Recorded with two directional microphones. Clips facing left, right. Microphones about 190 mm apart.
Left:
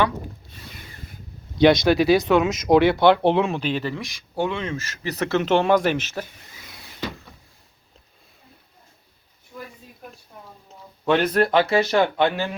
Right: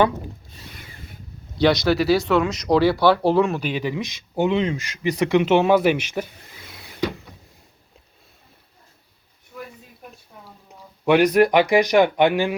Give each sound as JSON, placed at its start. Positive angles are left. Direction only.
{"t": 1.5, "sound": "speech", "side_deg": 20}
{"t": 3.3, "sound": "speech", "side_deg": 0}
{"t": 9.5, "sound": "a sound", "side_deg": 0}
{"t": 10.7, "sound": "speech", "side_deg": -15}